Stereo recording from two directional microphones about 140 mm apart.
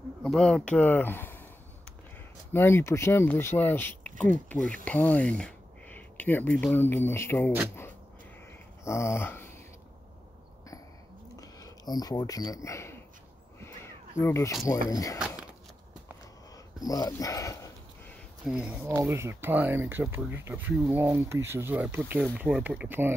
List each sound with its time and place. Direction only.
0.2 s speech: 5° left (ahead or behind)
2.5 s speech: 15° left (ahead or behind)
8.8 s dog: 20° left (ahead or behind)
11.3 s speech: 25° left (ahead or behind)
14.1 s speech: 20° left (ahead or behind)
15.1 s a sound: 5° right (ahead or behind)
16.8 s speech: 25° left (ahead or behind)
18.4 s speech: 5° right (ahead or behind)
18.9 s speech: 20° right (ahead or behind)